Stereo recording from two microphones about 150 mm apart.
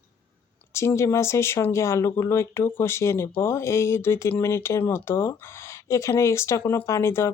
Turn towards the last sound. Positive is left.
turn(degrees=15)  # may be behind; listen again after turning